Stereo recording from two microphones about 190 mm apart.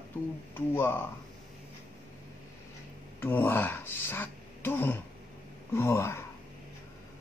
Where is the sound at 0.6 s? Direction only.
10° left (ahead or behind).